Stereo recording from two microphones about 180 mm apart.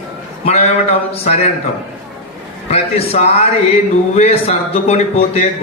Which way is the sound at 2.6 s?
35° left (ahead or behind).